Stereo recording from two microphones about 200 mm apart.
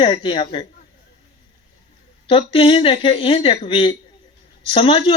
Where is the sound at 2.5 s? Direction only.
25° left (ahead or behind).